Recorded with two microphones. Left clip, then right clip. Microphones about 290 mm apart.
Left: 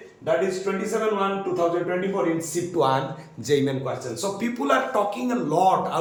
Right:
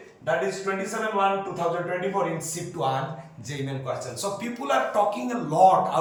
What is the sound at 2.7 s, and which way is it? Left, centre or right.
A man's voice, centre.